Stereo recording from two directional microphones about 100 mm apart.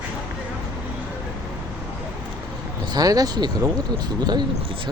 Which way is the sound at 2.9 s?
40° right (ahead or behind).